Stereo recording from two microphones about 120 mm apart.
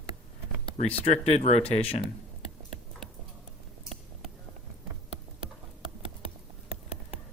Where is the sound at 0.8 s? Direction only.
70° left (ahead or behind).